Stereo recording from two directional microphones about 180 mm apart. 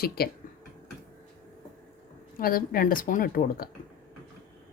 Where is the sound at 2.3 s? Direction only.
55° left (ahead or behind).